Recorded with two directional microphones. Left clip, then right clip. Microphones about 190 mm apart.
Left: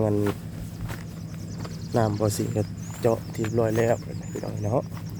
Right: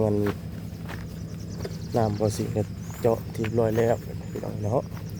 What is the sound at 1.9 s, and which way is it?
Speech, 15° left (ahead or behind).